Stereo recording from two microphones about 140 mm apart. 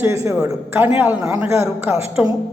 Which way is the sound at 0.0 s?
20° right (ahead or behind).